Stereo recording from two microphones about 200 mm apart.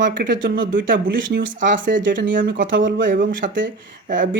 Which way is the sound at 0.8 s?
45° right (ahead or behind).